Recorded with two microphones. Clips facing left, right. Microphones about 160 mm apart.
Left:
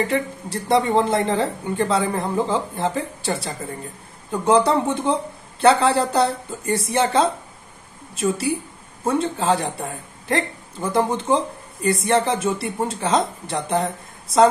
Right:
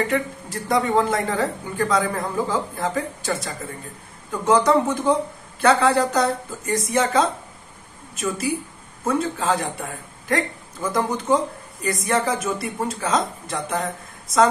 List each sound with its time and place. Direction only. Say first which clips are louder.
0.1 s a man's voice: left 1 dB; 30° left (ahead or behind)
9.0 s a man's voice: left 2 dB; 30° left (ahead or behind)